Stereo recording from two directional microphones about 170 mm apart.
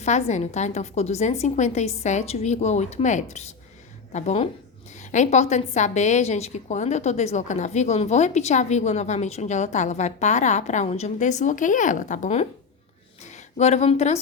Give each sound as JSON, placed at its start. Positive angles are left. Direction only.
{"t": 0.0, "sound": "a woman's voice", "side_deg": 45}